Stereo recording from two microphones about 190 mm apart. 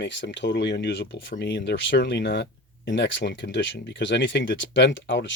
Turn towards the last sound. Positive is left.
turn(degrees=75)  # may be behind; listen again after turning